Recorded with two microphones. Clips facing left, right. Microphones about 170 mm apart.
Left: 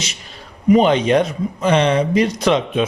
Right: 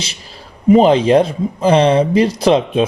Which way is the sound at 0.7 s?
30° right (ahead or behind).